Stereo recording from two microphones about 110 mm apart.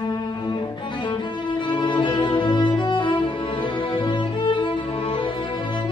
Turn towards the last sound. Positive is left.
turn(degrees=60)  # may be behind; listen again after turning